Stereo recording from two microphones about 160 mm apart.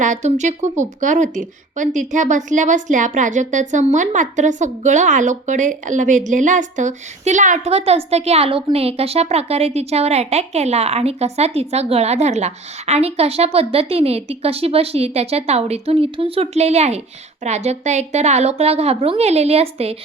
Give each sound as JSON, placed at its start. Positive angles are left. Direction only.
{"t": 0.0, "sound": "a woman's voice", "side_deg": -50}